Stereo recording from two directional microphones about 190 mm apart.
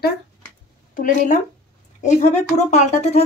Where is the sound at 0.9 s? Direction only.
45° left (ahead or behind).